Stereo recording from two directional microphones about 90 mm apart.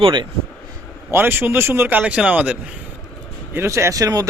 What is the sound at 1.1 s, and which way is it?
Speech, 25° right (ahead or behind).